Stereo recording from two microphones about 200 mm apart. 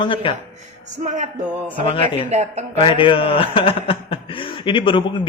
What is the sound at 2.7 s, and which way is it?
A man's voice, 25° left (ahead or behind).